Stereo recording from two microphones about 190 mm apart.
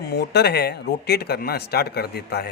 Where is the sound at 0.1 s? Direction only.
60° left (ahead or behind).